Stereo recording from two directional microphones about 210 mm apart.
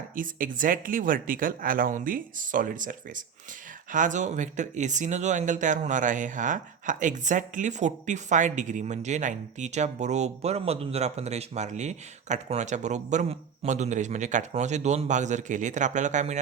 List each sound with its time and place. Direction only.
0.2 s speech: 40° right (ahead or behind)